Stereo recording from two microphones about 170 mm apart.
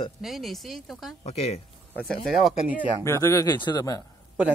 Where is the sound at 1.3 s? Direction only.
40° left (ahead or behind).